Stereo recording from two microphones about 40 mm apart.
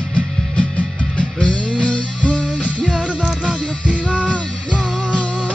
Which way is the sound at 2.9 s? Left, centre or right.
Right.